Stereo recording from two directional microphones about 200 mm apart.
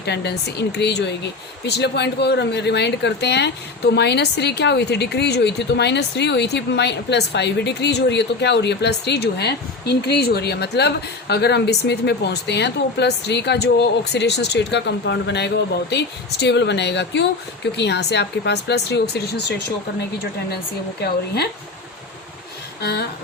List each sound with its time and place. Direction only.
0.0 s speech: 55° left (ahead or behind)
21.0 s speech: 55° left (ahead or behind)
22.8 s speech: 55° left (ahead or behind)